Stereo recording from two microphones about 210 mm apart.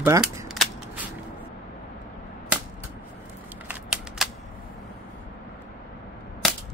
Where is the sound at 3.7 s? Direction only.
5° right (ahead or behind).